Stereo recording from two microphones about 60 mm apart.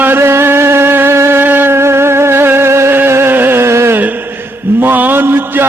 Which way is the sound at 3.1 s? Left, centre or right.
Right.